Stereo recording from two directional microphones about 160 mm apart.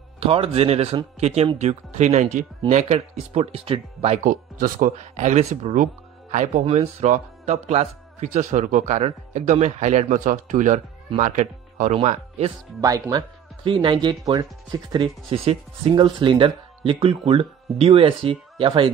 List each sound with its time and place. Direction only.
0.2 s speech: 35° right (ahead or behind)
12.8 s speech: 20° right (ahead or behind)